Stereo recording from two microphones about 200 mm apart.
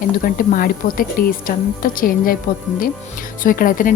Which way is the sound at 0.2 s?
45° left (ahead or behind).